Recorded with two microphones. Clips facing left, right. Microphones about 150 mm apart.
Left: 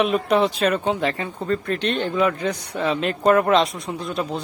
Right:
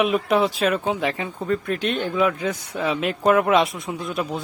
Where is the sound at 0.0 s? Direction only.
5° right (ahead or behind).